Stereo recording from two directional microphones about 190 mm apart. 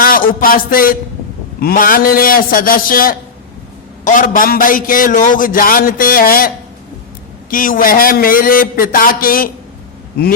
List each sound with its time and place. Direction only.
0.0 s a man's voice: 50° left (ahead or behind)
7.5 s a man's voice: 45° left (ahead or behind)